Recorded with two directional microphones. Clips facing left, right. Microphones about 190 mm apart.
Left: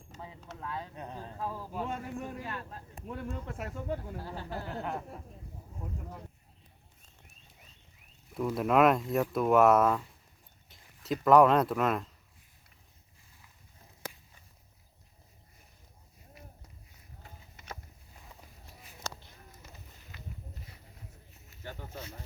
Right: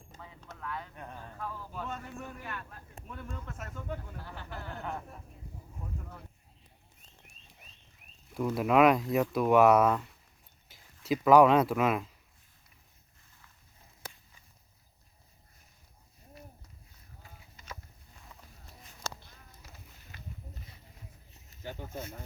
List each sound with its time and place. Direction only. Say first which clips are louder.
0.2 s vehicle: left 3 dB; 20° left (ahead or behind)
3.7 s speech: left 4 dB; 25° left (ahead or behind)
4.2 s speech: left 5 dB; 35° left (ahead or behind)
4.8 s speech: left 1 dB; 10° left (ahead or behind)
8.3 s speech: right 1 dB; centre (ahead or behind)